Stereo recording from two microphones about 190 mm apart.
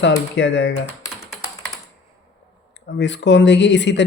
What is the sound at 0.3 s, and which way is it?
Speech, 70° left (ahead or behind).